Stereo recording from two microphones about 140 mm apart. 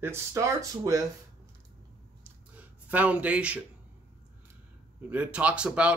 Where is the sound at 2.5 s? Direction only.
10° right (ahead or behind).